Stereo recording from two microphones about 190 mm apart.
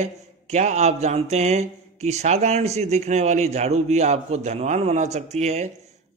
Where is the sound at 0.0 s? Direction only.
35° right (ahead or behind).